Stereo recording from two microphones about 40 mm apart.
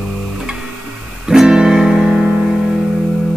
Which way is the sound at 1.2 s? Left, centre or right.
Centre.